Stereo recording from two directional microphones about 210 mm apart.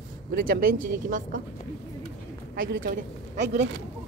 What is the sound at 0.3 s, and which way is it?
Speech, 45° right (ahead or behind).